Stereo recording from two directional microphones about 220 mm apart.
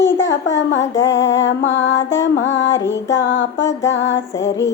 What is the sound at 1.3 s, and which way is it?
Music, 55° left (ahead or behind).